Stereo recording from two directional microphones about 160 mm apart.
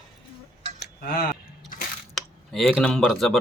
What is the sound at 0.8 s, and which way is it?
Cutlery, 75° left (ahead or behind).